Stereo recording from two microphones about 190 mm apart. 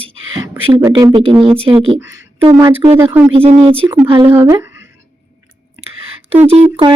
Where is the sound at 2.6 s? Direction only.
15° right (ahead or behind).